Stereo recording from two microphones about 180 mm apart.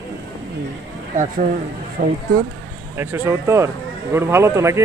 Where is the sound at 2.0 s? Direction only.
55° right (ahead or behind).